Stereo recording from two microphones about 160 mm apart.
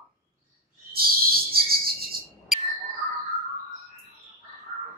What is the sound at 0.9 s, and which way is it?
Cricket, 70° right (ahead or behind).